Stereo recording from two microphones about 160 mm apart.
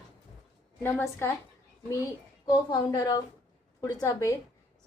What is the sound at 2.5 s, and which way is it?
A woman's voice, 25° left (ahead or behind).